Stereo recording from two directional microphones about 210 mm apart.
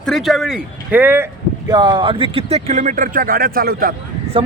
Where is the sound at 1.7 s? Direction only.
20° right (ahead or behind); by 3.9 s 45° right (ahead or behind).